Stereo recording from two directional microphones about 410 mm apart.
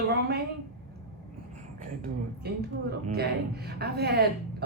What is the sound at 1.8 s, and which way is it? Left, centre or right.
Speech, right.